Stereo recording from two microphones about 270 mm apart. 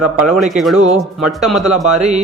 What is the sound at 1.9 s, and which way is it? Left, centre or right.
Speech, right.